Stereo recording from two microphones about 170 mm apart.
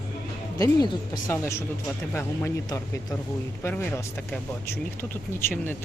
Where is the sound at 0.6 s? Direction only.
20° left (ahead or behind).